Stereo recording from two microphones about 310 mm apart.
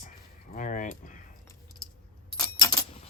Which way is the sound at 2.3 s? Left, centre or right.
Centre.